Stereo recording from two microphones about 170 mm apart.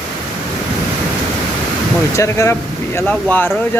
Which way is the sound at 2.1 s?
15° left (ahead or behind).